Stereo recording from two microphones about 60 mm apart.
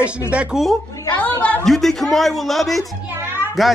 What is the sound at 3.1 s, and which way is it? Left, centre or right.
Children playing, right.